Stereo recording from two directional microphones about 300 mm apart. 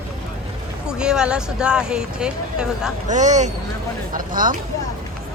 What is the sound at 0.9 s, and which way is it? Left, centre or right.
Speech, centre.